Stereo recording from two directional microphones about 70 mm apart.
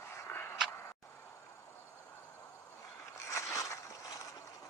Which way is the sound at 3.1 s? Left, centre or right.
Left.